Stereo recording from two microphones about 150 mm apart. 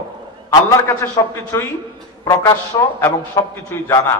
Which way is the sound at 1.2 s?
20° left (ahead or behind).